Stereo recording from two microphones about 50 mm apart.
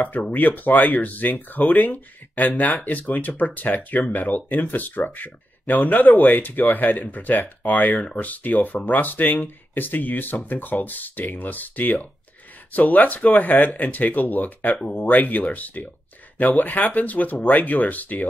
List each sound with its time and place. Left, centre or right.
0.3 s speech: left